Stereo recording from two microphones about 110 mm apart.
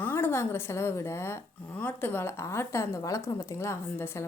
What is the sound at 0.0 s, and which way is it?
A woman's voice, 20° left (ahead or behind).